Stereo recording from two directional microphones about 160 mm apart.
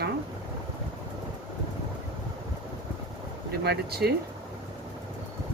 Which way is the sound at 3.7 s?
85° right.